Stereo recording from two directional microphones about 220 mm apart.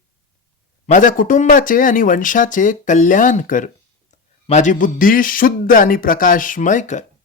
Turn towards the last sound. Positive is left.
turn(degrees=35)  # may be behind; listen again after turning